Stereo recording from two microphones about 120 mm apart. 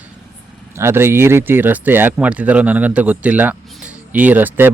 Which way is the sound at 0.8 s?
20° right (ahead or behind).